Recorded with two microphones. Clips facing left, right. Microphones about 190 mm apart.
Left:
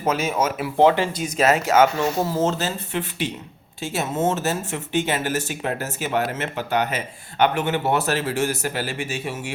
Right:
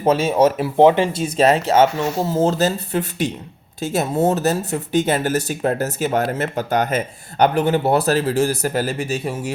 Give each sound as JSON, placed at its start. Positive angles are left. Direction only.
{"t": 0.0, "sound": "speech", "side_deg": -30}
{"t": 0.8, "sound": "speech", "side_deg": -20}